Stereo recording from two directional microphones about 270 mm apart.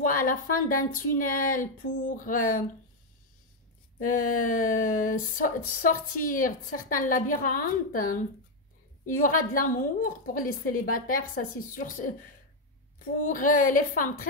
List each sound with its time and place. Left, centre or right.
0.0 s a woman's voice: left
4.4 s a woman's voice: left